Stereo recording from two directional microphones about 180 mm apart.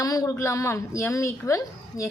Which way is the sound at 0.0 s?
20° left (ahead or behind).